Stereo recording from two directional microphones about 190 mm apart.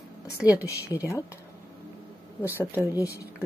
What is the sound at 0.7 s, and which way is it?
Speech, 15° left (ahead or behind).